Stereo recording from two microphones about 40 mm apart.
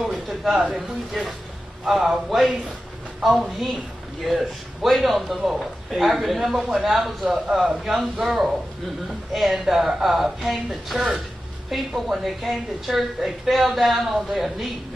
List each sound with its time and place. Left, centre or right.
0.0 s a sound: centre
0.6 s speech: centre
1.9 s a woman's voice: centre